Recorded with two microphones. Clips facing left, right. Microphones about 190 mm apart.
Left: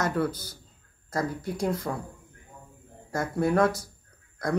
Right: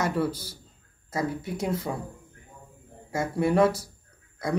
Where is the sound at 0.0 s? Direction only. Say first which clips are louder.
Even; 10° right (ahead or behind).